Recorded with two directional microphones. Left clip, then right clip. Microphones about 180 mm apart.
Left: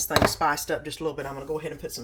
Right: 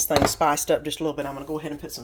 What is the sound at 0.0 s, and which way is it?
Speech, 35° right (ahead or behind).